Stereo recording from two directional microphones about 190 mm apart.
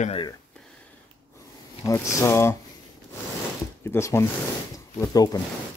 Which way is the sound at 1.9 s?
15° left (ahead or behind).